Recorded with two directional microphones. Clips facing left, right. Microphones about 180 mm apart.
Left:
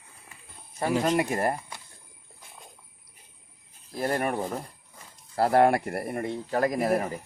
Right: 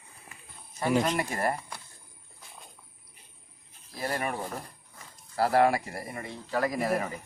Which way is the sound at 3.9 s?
50° left (ahead or behind).